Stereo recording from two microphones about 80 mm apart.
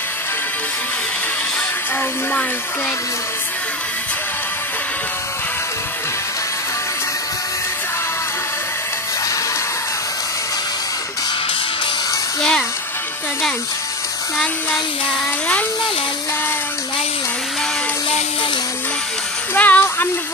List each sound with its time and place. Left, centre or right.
12.4 s speech: centre
19.5 s music: left